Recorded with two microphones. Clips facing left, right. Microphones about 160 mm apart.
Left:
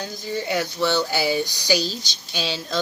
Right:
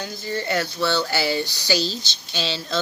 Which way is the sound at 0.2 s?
15° left (ahead or behind).